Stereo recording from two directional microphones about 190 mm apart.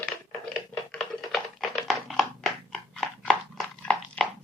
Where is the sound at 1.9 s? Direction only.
Centre (ahead or behind).